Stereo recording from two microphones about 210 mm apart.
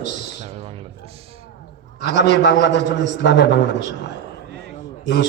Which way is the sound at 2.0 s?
55° left (ahead or behind).